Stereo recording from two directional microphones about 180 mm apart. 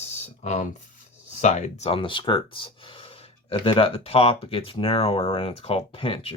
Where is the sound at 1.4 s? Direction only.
40° left (ahead or behind).